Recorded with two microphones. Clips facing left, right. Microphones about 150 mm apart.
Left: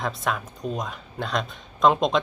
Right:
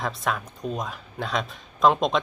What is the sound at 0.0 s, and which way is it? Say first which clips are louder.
Speech: even; centre (ahead or behind).